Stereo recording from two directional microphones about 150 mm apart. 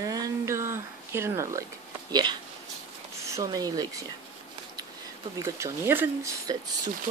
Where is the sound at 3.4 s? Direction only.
25° right (ahead or behind).